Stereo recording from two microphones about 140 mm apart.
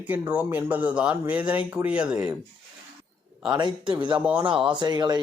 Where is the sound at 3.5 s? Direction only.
35° right (ahead or behind).